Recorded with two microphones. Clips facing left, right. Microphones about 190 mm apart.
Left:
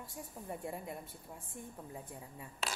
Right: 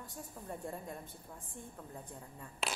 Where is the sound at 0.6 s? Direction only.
10° left (ahead or behind).